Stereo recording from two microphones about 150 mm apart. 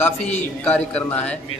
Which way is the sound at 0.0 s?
10° left (ahead or behind).